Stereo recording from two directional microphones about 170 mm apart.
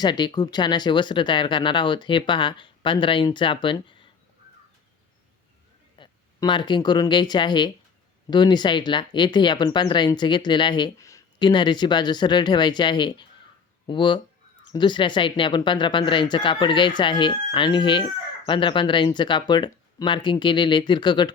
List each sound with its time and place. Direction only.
0.0 s speech: 25° left (ahead or behind)
6.0 s speech: 30° left (ahead or behind)